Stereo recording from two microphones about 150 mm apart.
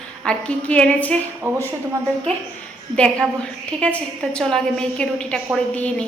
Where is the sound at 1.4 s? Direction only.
15° right (ahead or behind).